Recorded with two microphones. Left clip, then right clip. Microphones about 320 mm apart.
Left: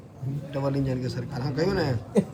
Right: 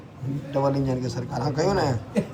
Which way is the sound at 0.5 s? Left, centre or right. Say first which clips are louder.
Right 5 dB; centre.